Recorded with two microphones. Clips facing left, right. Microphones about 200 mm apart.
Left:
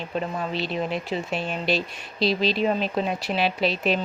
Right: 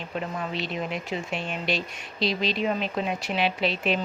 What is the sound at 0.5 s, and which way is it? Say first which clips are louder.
Speech: left 5 dB; 35° left (ahead or behind).